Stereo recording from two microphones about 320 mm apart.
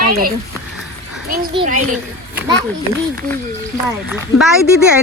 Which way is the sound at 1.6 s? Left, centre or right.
Right.